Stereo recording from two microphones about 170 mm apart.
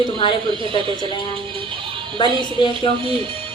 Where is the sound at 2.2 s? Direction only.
30° left (ahead or behind).